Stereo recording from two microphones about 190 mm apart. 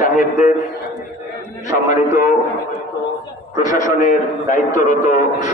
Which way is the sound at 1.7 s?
45° left (ahead or behind).